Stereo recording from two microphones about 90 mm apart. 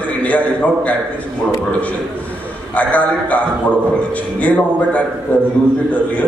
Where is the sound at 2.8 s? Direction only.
15° left (ahead or behind).